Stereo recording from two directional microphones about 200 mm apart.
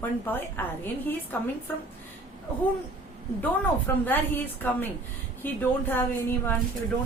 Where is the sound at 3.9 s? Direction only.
10° left (ahead or behind).